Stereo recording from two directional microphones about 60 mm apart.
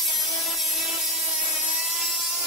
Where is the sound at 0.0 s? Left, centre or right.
Centre.